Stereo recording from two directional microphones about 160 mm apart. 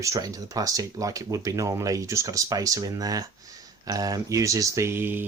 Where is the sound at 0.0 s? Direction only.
20° right (ahead or behind).